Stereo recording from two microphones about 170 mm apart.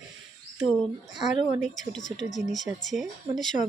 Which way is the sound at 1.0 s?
45° left (ahead or behind).